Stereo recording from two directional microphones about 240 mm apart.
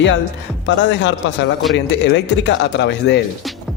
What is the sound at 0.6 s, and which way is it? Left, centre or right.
Speech, left.